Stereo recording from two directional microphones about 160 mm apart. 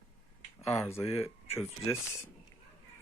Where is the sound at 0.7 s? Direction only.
15° left (ahead or behind).